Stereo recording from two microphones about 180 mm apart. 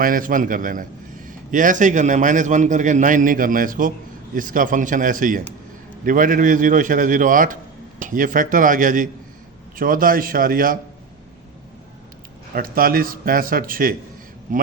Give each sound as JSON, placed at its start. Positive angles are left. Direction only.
{"t": 0.0, "sound": "a man's voice", "side_deg": -50}
{"t": 12.5, "sound": "a man's voice", "side_deg": -55}